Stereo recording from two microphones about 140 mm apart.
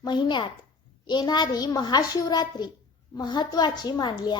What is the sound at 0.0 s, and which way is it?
A child's voice, 30° left (ahead or behind).